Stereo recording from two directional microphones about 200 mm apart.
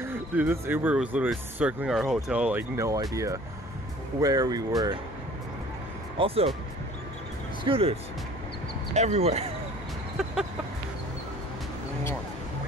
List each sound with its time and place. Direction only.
0.0 s speech: 10° right (ahead or behind)
6.1 s speech: 30° right (ahead or behind)
7.6 s speech: 30° right (ahead or behind)